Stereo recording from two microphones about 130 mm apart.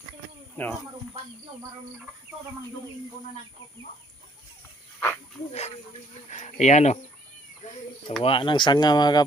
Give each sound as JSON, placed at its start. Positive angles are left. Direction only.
{"t": 0.5, "sound": "speech", "side_deg": 5}
{"t": 4.9, "sound": "snake", "side_deg": 15}
{"t": 5.5, "sound": "speech", "side_deg": 60}
{"t": 7.6, "sound": "a sound", "side_deg": 65}
{"t": 8.2, "sound": "speech", "side_deg": 40}